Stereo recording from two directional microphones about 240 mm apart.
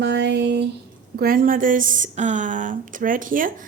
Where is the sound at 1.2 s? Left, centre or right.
Right.